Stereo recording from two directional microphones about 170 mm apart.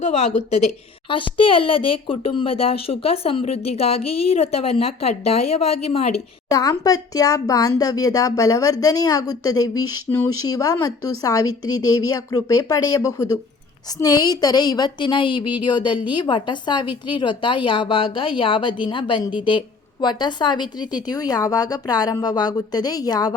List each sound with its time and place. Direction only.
0.0 s speech: 40° left (ahead or behind)
6.5 s speech: 20° left (ahead or behind)